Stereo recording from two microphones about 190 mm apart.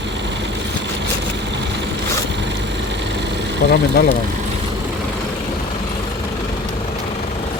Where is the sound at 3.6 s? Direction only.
40° left (ahead or behind).